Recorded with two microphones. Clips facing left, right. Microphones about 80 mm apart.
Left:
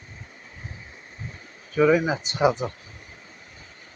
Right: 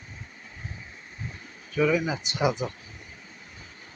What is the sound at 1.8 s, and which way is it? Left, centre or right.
Speech, left.